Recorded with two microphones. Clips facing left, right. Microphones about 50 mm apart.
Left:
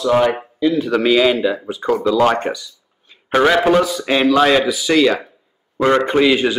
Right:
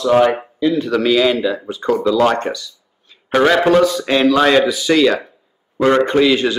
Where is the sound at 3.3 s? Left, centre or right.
Centre.